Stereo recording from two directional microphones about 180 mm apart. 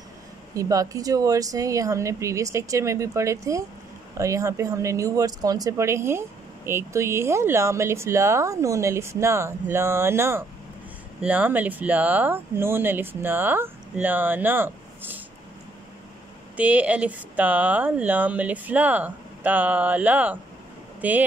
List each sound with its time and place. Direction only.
0.6 s speech: 20° right (ahead or behind)
16.5 s speech: 10° right (ahead or behind)